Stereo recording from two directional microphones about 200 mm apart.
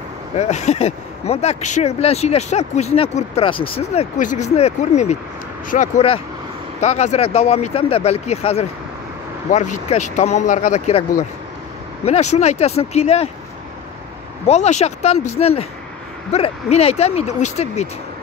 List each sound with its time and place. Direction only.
0.4 s speech: 35° left (ahead or behind)
14.5 s speech: 35° left (ahead or behind)